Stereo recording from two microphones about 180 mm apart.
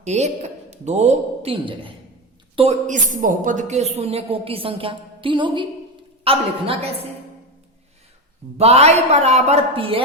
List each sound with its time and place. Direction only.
0.0 s a woman's voice: 40° right (ahead or behind)
8.5 s a woman's voice: 35° right (ahead or behind)